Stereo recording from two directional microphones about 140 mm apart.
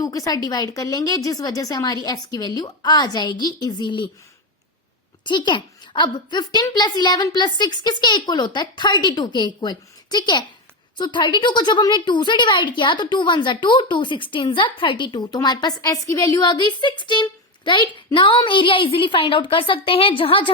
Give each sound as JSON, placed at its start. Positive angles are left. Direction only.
{"t": 0.0, "sound": "a woman's voice", "side_deg": 25}
{"t": 5.2, "sound": "a woman's voice", "side_deg": 35}